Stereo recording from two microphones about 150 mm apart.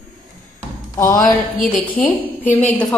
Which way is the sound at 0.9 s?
20° left (ahead or behind).